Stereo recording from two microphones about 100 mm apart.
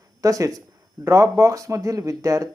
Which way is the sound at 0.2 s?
35° right (ahead or behind).